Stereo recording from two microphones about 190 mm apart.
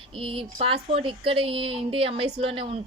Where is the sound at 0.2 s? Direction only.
30° right (ahead or behind).